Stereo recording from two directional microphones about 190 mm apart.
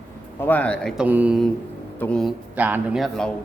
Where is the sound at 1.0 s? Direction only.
10° right (ahead or behind).